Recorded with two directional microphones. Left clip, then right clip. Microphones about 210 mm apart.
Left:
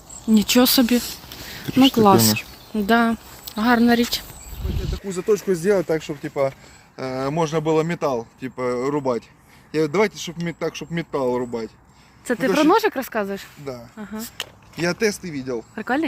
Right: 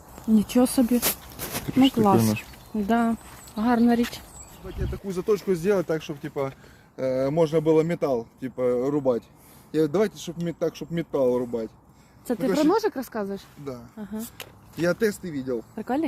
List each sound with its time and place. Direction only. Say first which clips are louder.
0.3 s speech: left 5 dB; centre (ahead or behind)
1.6 s speech: left 6 dB; 15° left (ahead or behind)
5.0 s speech: left 4 dB; 20° left (ahead or behind)
12.7 s speech: left 6 dB; 10° left (ahead or behind)
14.3 s speech: left 6 dB; 35° left (ahead or behind)
15.7 s speech: left 7 dB; centre (ahead or behind)